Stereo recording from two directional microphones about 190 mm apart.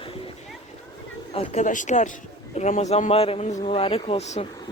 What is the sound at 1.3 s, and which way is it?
Speech, 35° left (ahead or behind).